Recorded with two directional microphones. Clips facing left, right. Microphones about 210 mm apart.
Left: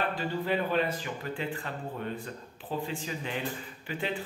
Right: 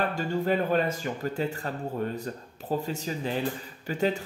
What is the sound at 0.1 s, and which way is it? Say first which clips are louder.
A man's voice: right 4 dB; 45° right (ahead or behind).